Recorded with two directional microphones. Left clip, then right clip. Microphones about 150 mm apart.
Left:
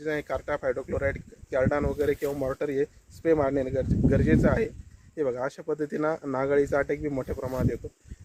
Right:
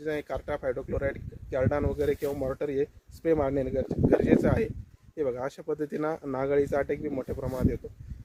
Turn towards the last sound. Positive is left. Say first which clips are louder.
# left 2 dB
turn(degrees=-5)  # may be behind; listen again after turning